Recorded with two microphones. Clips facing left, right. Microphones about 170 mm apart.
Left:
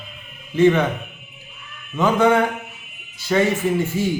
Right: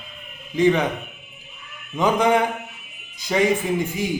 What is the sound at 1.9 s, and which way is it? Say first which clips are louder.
Speech: left 2 dB; 15° right (ahead or behind).